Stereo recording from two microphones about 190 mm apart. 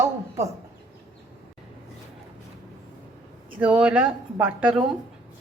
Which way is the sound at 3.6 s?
5° right (ahead or behind).